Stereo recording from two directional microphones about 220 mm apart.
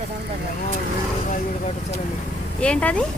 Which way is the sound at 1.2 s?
35° left (ahead or behind).